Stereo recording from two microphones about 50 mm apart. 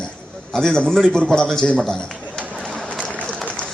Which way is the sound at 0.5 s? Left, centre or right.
Centre.